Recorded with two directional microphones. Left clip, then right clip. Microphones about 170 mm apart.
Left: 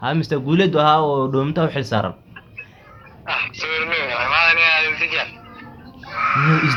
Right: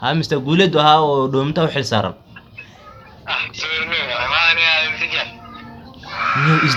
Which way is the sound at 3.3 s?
20° left (ahead or behind).